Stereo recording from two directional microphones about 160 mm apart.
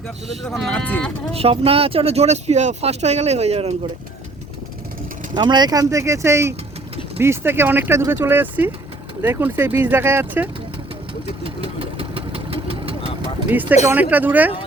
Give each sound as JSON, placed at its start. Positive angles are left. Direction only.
{"t": 0.4, "sound": "speech", "side_deg": 5}
{"t": 1.3, "sound": "speech", "side_deg": -35}
{"t": 5.3, "sound": "speech", "side_deg": -25}
{"t": 11.4, "sound": "vehicle", "side_deg": -35}
{"t": 13.5, "sound": "speech", "side_deg": -10}